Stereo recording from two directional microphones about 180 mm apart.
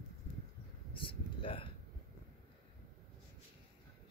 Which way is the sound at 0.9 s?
30° left (ahead or behind).